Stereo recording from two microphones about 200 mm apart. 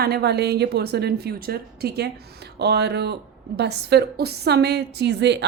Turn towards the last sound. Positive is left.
turn(degrees=-60)  # may be behind; listen again after turning